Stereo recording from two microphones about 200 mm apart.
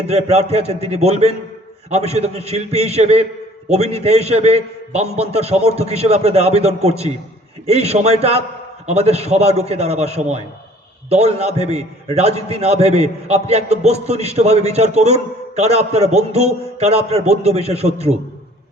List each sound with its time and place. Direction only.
0.0 s a man's voice: 30° right (ahead or behind)